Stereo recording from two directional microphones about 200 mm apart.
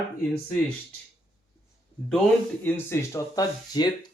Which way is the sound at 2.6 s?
10° left (ahead or behind).